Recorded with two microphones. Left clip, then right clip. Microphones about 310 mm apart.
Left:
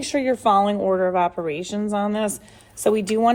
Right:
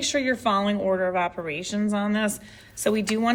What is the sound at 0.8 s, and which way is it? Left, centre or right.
Speech, left.